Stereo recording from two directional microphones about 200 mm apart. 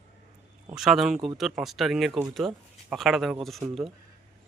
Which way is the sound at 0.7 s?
Centre (ahead or behind).